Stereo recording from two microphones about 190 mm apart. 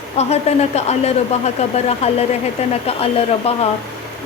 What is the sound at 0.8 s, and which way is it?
Speech, 35° left (ahead or behind).